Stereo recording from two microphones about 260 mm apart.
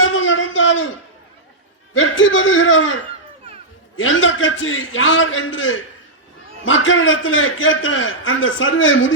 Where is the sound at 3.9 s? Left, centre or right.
Left.